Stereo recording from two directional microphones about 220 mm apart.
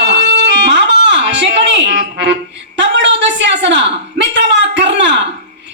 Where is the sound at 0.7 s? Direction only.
55° right (ahead or behind).